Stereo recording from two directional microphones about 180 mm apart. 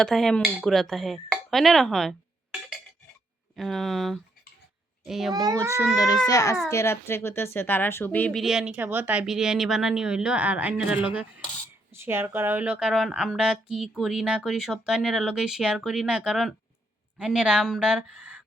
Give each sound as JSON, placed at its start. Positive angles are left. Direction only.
{"t": 0.0, "sound": "a woman's voice", "side_deg": 0}
{"t": 3.5, "sound": "a woman's voice", "side_deg": 0}
{"t": 5.3, "sound": "a child's voice", "side_deg": -20}
{"t": 5.9, "sound": "a child's voice", "side_deg": 20}